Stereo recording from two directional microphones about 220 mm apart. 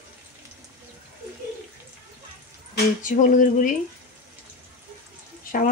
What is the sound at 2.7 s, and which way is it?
Speech, 35° left (ahead or behind).